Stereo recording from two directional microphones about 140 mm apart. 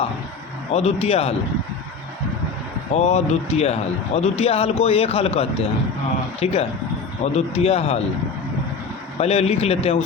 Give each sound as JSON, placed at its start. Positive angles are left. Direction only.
{"t": 0.7, "sound": "speech", "side_deg": 50}
{"t": 2.9, "sound": "speech", "side_deg": 55}
{"t": 9.1, "sound": "speech", "side_deg": 50}